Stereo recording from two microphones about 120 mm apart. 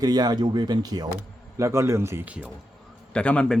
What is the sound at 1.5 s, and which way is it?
Speech, 25° right (ahead or behind).